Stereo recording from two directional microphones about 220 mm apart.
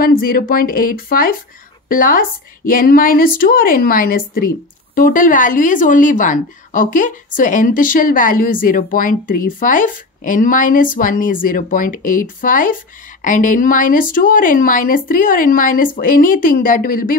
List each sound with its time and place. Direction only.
0.0 s speech: 40° left (ahead or behind)